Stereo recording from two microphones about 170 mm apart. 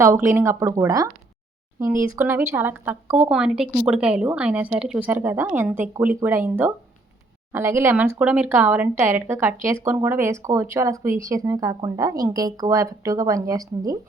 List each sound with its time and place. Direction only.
0.0 s a woman's voice: 15° right (ahead or behind)